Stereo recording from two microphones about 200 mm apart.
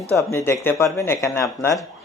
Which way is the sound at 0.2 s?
15° left (ahead or behind).